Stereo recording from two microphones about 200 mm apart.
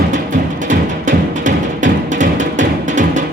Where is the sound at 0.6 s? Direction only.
40° right (ahead or behind).